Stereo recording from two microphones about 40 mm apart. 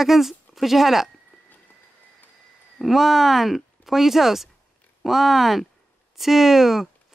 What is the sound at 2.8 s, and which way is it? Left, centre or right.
Speech, centre.